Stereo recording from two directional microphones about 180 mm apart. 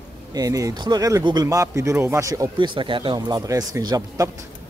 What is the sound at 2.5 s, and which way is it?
A man's voice, 25° right (ahead or behind).